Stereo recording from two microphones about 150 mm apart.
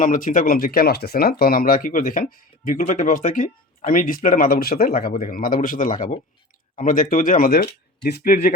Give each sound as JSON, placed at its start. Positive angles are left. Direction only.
{"t": 0.0, "sound": "speech", "side_deg": 65}